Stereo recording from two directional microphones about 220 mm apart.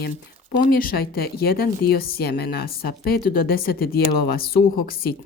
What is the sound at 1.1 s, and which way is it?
Speech, 45° left (ahead or behind).